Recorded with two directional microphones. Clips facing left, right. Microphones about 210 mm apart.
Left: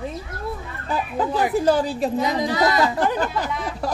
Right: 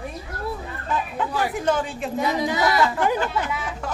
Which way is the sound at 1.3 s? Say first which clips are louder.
Left 5 dB; 20° left (ahead or behind).